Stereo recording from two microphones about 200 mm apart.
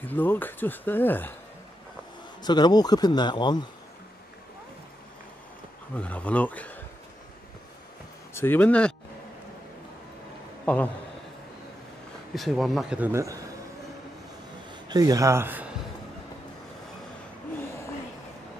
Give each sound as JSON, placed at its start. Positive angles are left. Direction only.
{"t": 0.0, "sound": "speech", "side_deg": 10}
{"t": 2.4, "sound": "speech", "side_deg": 20}
{"t": 5.9, "sound": "speech", "side_deg": 5}
{"t": 8.4, "sound": "speech", "side_deg": 10}
{"t": 10.6, "sound": "a sound", "side_deg": 5}
{"t": 12.4, "sound": "speech", "side_deg": 0}
{"t": 14.7, "sound": "a man's voice", "side_deg": -20}